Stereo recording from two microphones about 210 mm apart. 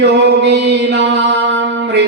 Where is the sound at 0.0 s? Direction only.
55° right (ahead or behind).